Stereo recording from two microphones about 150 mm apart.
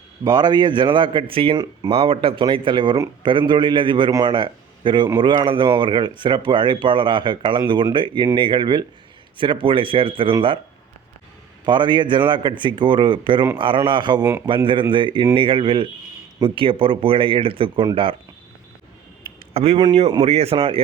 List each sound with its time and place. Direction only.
0.3 s speech: 25° right (ahead or behind)
11.6 s speech: 30° right (ahead or behind)
19.5 s speech: 40° right (ahead or behind)